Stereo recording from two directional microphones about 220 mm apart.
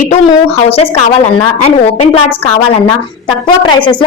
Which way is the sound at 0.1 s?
25° left (ahead or behind).